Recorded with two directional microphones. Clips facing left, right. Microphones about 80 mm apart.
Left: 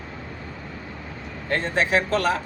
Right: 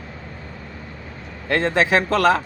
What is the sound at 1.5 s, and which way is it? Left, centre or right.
Speech, right.